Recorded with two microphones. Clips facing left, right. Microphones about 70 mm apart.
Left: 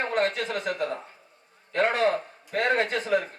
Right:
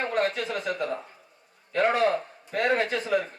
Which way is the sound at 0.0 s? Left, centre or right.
Left.